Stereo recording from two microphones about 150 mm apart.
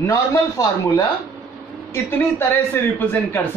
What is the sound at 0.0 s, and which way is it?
Speech, 20° left (ahead or behind).